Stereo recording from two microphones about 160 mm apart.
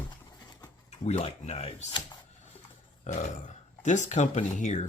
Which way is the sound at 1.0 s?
45° left (ahead or behind).